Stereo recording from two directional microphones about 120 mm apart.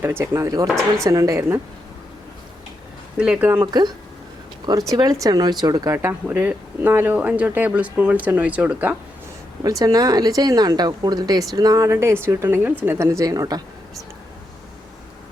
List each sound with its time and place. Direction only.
0.0 s speech: 20° right (ahead or behind)
3.2 s speech: 10° right (ahead or behind)
3.7 s speech: 35° right (ahead or behind); by 9.0 s 15° right (ahead or behind)
9.6 s speech: 30° right (ahead or behind)